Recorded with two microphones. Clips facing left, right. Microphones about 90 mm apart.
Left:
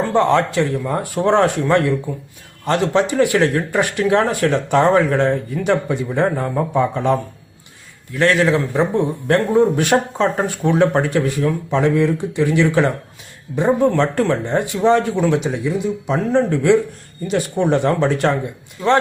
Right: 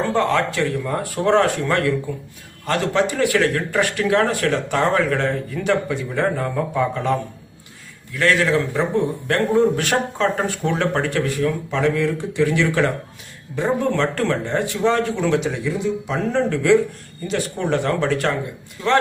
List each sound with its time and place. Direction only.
0.1 s a man's voice: 20° left (ahead or behind)
8.2 s a man's voice: 25° left (ahead or behind)